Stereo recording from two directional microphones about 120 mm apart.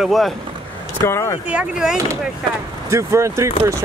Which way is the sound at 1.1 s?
25° left (ahead or behind).